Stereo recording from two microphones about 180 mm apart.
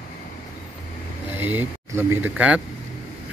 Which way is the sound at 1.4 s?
10° right (ahead or behind).